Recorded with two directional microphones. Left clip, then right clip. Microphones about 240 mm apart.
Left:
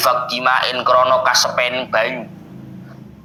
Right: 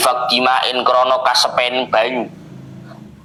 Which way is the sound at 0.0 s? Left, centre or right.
Centre.